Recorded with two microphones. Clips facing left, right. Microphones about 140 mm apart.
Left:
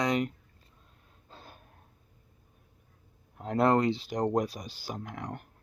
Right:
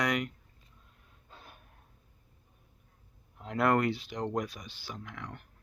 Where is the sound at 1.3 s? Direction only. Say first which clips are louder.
Left 3 dB; 30° left (ahead or behind).